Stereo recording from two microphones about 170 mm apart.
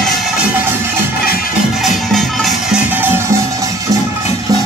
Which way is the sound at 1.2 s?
60° left (ahead or behind).